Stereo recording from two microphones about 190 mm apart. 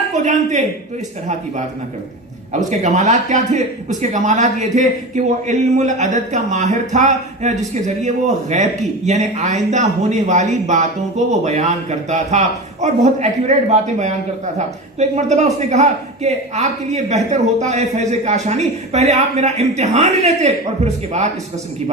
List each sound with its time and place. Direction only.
2.5 s a man's voice: 40° right (ahead or behind)